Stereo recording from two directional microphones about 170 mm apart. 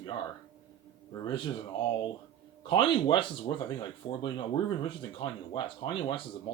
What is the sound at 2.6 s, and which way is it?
Speech, 30° left (ahead or behind).